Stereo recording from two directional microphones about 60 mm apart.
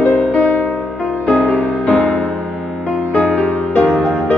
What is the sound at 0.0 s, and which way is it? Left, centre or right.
Music, left.